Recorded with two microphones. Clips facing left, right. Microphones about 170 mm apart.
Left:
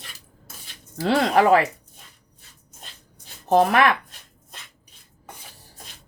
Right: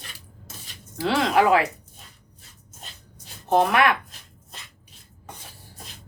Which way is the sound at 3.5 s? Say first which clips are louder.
Left 2 dB; 40° left (ahead or behind).